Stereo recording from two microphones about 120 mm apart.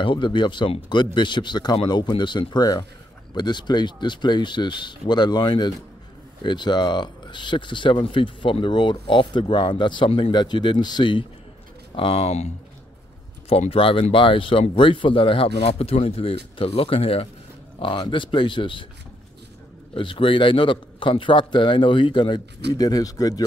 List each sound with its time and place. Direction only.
0.0 s speech: 45° left (ahead or behind)
11.9 s speech: 50° left (ahead or behind)
13.5 s a man's voice: 55° left (ahead or behind)
19.9 s a man's voice: 45° left (ahead or behind)